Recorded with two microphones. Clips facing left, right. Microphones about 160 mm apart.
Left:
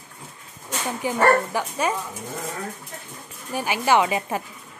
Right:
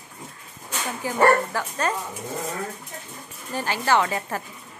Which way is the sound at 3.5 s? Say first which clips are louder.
Left 2 dB; 15° left (ahead or behind).